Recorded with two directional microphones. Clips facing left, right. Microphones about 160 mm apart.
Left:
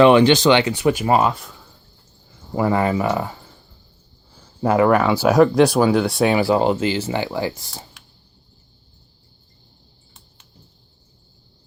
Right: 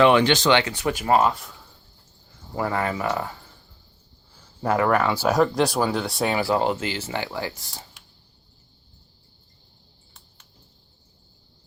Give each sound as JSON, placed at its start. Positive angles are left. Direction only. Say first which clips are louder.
{"t": 0.0, "sound": "speech", "louder": "left 5 dB", "side_deg": 20}
{"t": 2.6, "sound": "speech", "louder": "left 6 dB", "side_deg": 20}
{"t": 4.6, "sound": "speech", "louder": "left 5 dB", "side_deg": 15}
{"t": 5.3, "sound": "speech", "louder": "left 8 dB", "side_deg": 0}
{"t": 6.2, "sound": "speech", "louder": "left 4 dB", "side_deg": 15}